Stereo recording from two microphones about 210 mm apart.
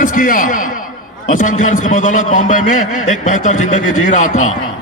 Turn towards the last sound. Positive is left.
turn(degrees=35)  # may be behind; listen again after turning